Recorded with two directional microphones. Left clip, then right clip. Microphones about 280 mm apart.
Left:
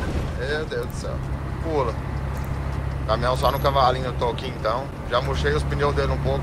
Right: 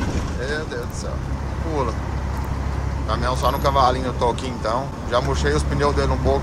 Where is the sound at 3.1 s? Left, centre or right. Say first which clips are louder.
Even; centre.